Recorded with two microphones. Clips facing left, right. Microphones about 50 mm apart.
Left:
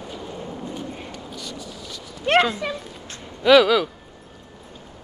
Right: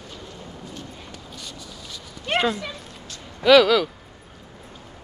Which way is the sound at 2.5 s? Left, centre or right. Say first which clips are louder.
Left 3 dB; centre.